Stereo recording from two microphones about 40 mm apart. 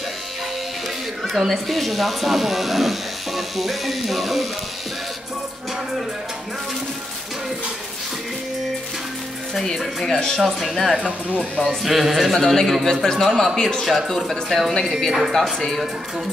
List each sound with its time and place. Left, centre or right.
1.2 s speech: centre
9.5 s speech: centre
10.4 s speech: centre
11.0 s speech: right
11.6 s speech: centre
13.8 s speech: centre